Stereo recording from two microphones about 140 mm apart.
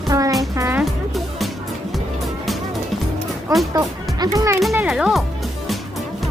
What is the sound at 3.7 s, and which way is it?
Music, 25° right (ahead or behind).